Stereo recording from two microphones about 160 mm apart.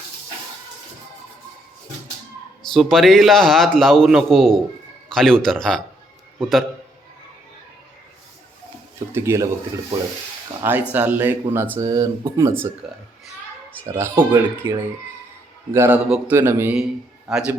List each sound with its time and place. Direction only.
2.6 s a man's voice: centre (ahead or behind)
9.1 s speech: 15° right (ahead or behind)
10.6 s speech: 10° right (ahead or behind)
13.8 s speech: 15° right (ahead or behind)
16.0 s a man's voice: 5° right (ahead or behind)
16.3 s speech: 15° right (ahead or behind)
17.2 s a man's voice: 5° right (ahead or behind)